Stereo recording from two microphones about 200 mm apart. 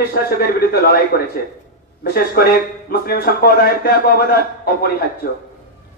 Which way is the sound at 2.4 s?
50° left (ahead or behind).